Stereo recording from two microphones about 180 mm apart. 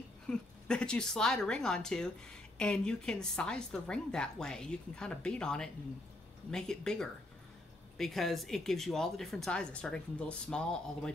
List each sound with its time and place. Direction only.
0.3 s a woman's voice: 5° left (ahead or behind)